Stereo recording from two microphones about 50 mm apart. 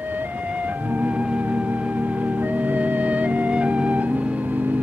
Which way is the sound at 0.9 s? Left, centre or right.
Right.